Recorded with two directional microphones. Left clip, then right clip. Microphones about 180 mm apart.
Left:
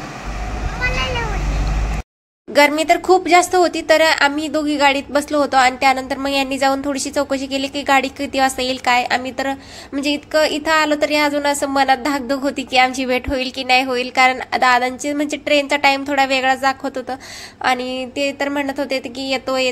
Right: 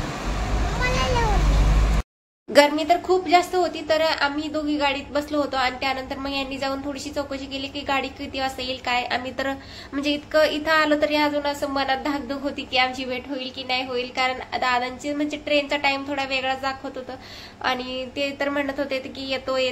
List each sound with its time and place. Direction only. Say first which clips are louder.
0.7 s vehicle: left 3 dB; 15° right (ahead or behind)
2.6 s a woman's voice: left 7 dB; 45° left (ahead or behind)
9.2 s a woman's voice: left 5 dB; 25° left (ahead or behind)